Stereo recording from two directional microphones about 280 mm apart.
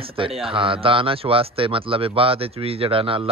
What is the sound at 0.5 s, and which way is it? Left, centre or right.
A man's voice, centre.